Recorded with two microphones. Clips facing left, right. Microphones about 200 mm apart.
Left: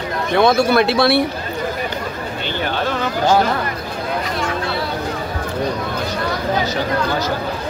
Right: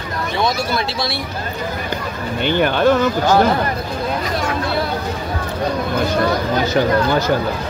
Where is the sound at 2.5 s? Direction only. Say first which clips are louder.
Right 8 dB; 55° right (ahead or behind).